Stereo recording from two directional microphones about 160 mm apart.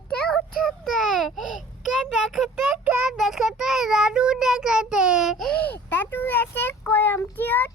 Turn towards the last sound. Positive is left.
turn(degrees=10)  # may be behind; listen again after turning